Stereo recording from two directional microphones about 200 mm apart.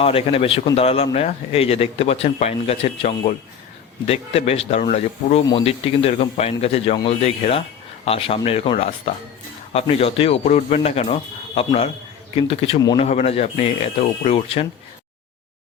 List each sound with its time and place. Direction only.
0.0 s a man's voice: 30° left (ahead or behind)